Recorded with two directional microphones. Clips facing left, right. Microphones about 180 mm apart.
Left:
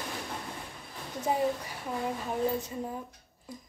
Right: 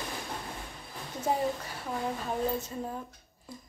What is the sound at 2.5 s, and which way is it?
Speech, 15° left (ahead or behind).